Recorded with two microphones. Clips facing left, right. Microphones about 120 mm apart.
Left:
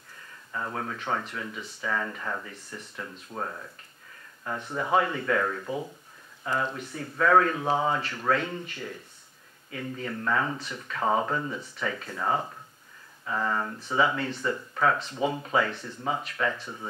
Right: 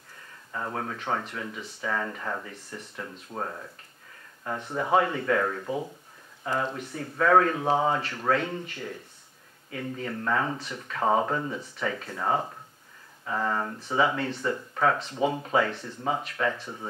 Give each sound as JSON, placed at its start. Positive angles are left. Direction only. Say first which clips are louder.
{"t": 0.5, "sound": "speech", "louder": "right 1 dB", "side_deg": -30}